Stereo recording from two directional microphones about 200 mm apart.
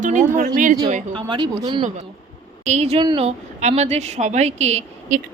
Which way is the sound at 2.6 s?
35° right (ahead or behind).